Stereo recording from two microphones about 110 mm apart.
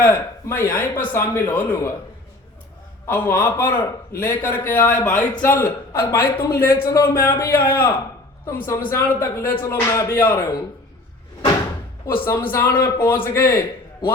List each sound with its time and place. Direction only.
0.0 s speech: 20° left (ahead or behind)
3.1 s a man's voice: 25° left (ahead or behind)
5.9 s speech: 25° left (ahead or behind)
12.0 s speech: 20° left (ahead or behind)
12.8 s speech: 40° left (ahead or behind)
13.2 s speech: 30° left (ahead or behind)